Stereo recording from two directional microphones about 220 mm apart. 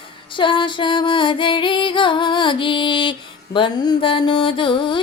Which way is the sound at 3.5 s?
20° left (ahead or behind).